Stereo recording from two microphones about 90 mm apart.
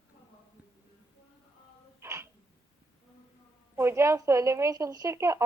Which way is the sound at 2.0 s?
35° right (ahead or behind).